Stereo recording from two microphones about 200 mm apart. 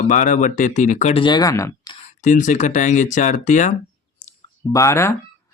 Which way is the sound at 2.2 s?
40° left (ahead or behind).